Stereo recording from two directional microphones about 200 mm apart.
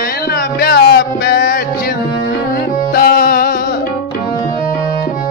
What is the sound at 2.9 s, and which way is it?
Music, 50° left (ahead or behind).